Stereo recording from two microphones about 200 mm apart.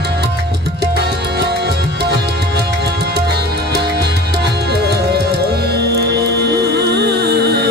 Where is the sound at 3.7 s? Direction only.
55° right (ahead or behind).